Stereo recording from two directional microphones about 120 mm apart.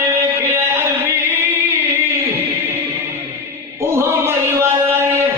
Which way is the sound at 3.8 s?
20° right (ahead or behind).